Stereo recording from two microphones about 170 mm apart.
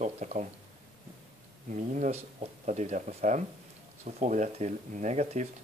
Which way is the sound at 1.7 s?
45° right (ahead or behind).